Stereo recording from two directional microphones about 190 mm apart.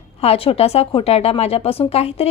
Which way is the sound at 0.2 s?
30° left (ahead or behind).